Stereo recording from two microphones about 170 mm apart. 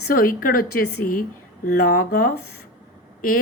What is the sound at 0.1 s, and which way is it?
Speech, 60° left (ahead or behind).